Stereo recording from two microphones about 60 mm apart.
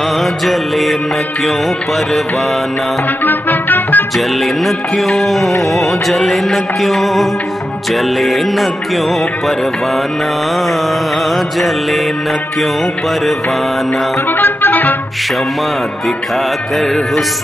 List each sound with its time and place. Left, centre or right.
0.2 s music: centre
3.3 s music: left
4.6 s music: centre
14.4 s music: left